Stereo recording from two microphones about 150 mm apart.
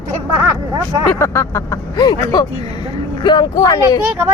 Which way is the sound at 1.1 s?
15° left (ahead or behind).